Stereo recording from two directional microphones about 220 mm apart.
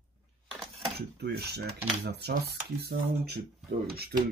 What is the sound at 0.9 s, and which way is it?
Speech, 50° right (ahead or behind).